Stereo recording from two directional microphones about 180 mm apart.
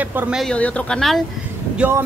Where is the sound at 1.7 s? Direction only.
10° right (ahead or behind).